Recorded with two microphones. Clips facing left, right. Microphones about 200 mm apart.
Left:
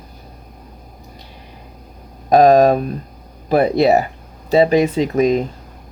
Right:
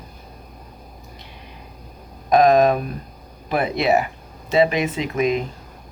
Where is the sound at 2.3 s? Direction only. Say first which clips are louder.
Left 4 dB; 35° left (ahead or behind).